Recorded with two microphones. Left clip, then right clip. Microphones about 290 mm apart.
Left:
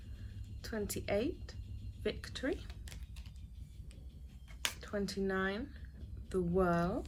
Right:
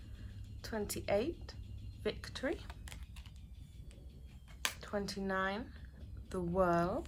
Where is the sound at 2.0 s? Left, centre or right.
Centre.